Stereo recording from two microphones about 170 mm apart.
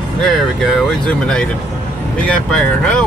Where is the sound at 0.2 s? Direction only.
Centre (ahead or behind).